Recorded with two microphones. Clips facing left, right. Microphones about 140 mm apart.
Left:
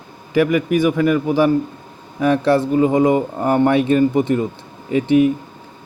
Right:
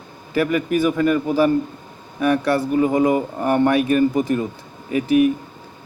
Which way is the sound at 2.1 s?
25° left (ahead or behind).